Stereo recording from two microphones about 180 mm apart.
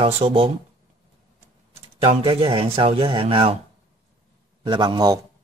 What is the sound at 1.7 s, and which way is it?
Speech, 30° right (ahead or behind).